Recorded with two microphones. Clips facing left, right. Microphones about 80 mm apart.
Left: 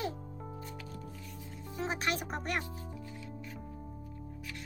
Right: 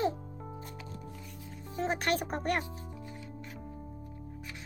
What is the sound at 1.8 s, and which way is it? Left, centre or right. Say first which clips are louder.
Speech: right 4 dB; right.